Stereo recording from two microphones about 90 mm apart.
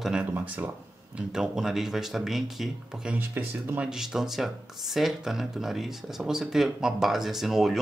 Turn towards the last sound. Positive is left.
turn(degrees=-5)  # may be behind; listen again after turning